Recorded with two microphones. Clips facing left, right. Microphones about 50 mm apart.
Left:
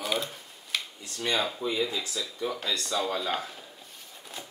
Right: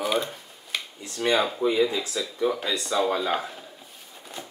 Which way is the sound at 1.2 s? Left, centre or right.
Centre.